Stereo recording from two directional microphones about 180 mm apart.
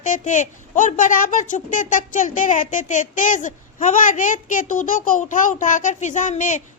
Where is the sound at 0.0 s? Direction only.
45° left (ahead or behind).